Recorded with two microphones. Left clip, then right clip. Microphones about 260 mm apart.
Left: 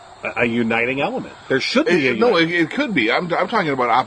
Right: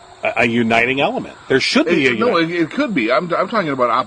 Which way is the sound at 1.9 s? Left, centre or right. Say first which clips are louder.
Left 2 dB; left.